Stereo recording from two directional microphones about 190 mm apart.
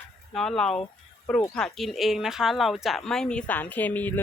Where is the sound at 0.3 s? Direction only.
5° left (ahead or behind).